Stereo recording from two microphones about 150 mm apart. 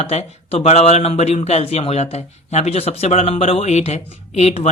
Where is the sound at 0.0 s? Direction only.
45° left (ahead or behind).